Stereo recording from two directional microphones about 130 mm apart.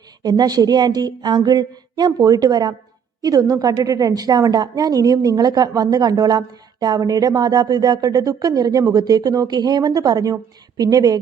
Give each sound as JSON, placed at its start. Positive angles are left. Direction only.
{"t": 0.2, "sound": "a woman's voice", "side_deg": -30}